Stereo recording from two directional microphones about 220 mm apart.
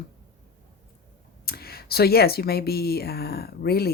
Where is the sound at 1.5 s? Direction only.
45° left (ahead or behind).